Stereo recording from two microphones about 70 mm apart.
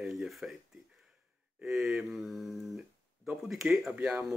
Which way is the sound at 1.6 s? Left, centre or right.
Centre.